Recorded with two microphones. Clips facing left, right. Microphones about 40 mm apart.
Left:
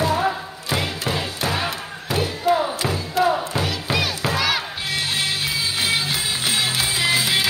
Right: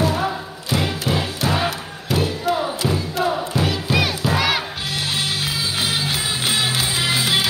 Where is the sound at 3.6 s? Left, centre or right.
Centre.